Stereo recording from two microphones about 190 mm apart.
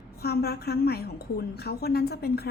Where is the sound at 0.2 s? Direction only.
55° left (ahead or behind).